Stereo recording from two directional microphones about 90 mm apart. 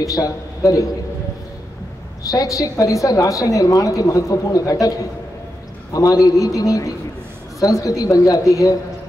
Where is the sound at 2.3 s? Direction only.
40° left (ahead or behind).